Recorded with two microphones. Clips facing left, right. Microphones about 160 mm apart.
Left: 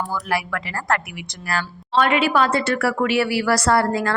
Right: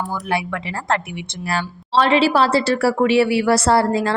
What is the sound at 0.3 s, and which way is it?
A woman's voice, 25° right (ahead or behind).